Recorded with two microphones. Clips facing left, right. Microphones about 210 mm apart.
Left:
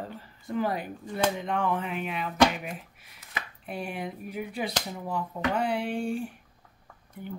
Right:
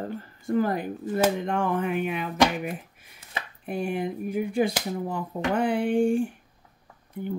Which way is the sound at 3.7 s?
50° right (ahead or behind).